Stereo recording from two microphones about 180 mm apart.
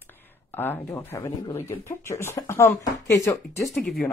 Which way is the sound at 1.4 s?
30° left (ahead or behind).